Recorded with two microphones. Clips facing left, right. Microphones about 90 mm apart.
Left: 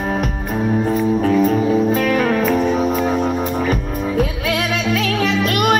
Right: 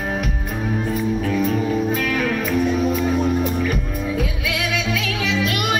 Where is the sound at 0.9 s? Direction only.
40° left (ahead or behind).